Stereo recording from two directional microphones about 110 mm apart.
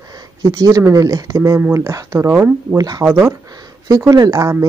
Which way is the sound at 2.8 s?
35° right (ahead or behind).